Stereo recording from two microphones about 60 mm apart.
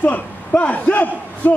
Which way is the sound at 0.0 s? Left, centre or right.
Left.